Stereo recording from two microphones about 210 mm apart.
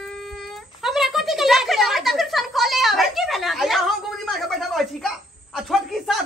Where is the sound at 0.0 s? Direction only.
Centre (ahead or behind).